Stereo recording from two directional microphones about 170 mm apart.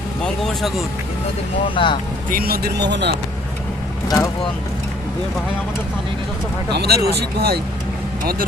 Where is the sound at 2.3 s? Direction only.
60° right (ahead or behind).